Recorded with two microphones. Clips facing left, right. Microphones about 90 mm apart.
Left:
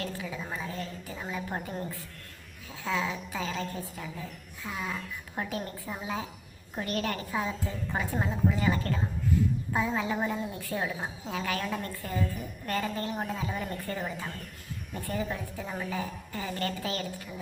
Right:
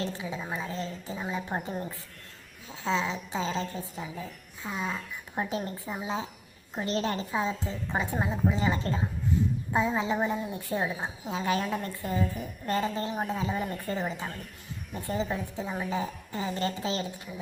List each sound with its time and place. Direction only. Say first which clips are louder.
0.0 s a woman's voice: right 2 dB; 20° right (ahead or behind)